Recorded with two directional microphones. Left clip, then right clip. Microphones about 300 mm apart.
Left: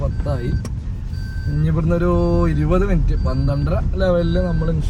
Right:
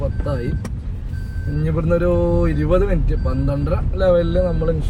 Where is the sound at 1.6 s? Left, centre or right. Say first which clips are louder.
Right 2 dB; centre.